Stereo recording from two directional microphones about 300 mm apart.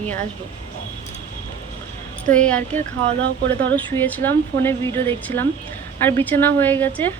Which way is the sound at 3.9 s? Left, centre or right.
Centre.